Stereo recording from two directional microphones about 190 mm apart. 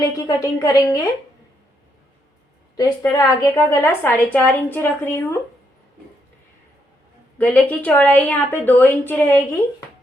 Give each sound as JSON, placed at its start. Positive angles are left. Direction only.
{"t": 0.0, "sound": "a woman's voice", "side_deg": 20}
{"t": 2.7, "sound": "a woman's voice", "side_deg": 20}
{"t": 7.3, "sound": "a woman's voice", "side_deg": 10}